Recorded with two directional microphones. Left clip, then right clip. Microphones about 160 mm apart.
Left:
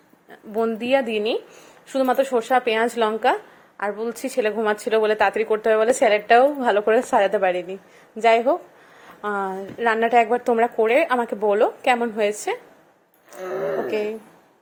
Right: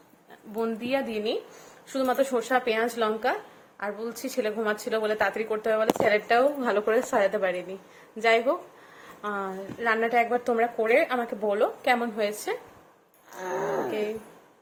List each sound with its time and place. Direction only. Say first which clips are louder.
0.5 s a woman's voice: left 8 dB; 35° left (ahead or behind)
13.4 s music: left 4 dB; centre (ahead or behind)